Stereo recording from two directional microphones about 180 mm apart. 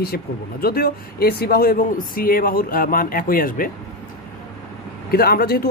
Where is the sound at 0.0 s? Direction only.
60° left (ahead or behind).